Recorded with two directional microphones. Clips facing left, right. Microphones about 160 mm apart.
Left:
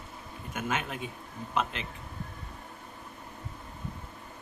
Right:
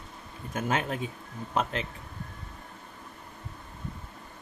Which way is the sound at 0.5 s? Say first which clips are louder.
Right 4 dB; 35° right (ahead or behind).